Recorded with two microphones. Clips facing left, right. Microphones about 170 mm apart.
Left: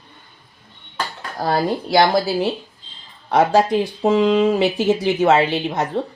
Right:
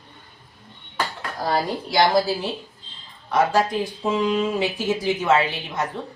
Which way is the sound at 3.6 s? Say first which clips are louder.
Left 7 dB; 70° left (ahead or behind).